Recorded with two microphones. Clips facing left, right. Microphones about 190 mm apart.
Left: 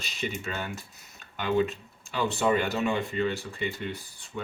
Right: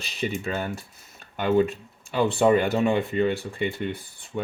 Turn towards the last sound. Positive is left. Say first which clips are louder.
# right 6 dB
turn(degrees=-25)  # may be behind; listen again after turning